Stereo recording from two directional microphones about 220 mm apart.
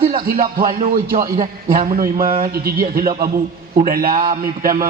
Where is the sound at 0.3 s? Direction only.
40° right (ahead or behind).